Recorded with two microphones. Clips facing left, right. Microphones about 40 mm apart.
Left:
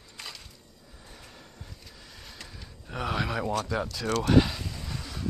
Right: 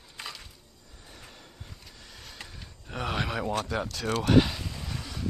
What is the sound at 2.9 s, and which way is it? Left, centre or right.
Speech, centre.